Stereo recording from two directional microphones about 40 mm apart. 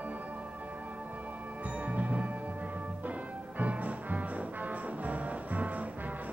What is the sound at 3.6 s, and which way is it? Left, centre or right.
Music, right.